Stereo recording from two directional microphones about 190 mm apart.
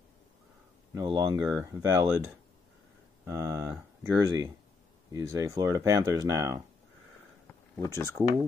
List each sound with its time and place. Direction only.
0.9 s speech: 20° right (ahead or behind)
3.3 s speech: 15° right (ahead or behind)
7.8 s speech: 15° left (ahead or behind)